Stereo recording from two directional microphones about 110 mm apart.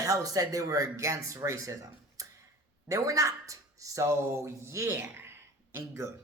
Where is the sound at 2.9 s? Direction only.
30° right (ahead or behind).